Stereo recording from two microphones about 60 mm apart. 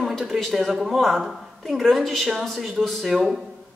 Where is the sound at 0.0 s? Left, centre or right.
Centre.